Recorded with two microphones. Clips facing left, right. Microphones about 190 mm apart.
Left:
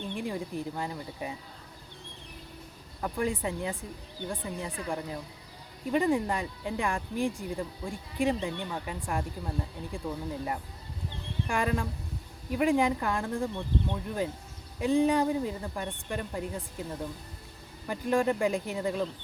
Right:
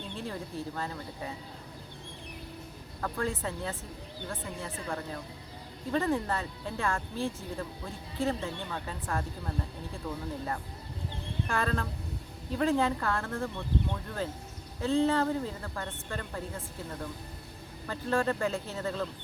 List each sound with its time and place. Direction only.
0.1 s speech: 15° left (ahead or behind)
3.0 s speech: 15° left (ahead or behind)
11.4 s speech: 15° left (ahead or behind)